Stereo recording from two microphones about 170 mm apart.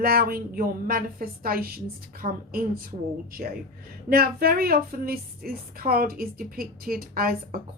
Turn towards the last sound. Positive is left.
turn(degrees=-60)  # may be behind; listen again after turning